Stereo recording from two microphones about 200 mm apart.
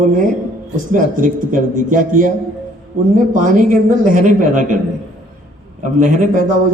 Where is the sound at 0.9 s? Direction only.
40° right (ahead or behind).